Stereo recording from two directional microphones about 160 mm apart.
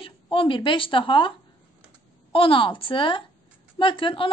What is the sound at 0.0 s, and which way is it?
A woman's voice, 35° left (ahead or behind).